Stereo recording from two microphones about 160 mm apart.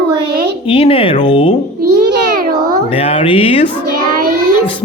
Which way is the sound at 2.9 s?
35° left (ahead or behind).